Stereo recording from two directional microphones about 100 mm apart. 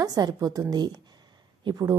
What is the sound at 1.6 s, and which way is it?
Speech, 35° right (ahead or behind).